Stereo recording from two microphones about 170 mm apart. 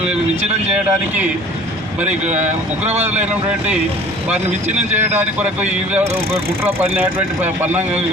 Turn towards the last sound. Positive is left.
turn(degrees=-10)  # may be behind; listen again after turning